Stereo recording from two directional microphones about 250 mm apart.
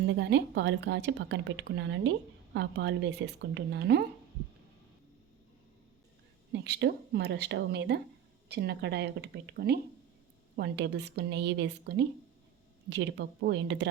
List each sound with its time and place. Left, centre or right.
0.1 s a woman's voice: right
6.5 s a woman's voice: right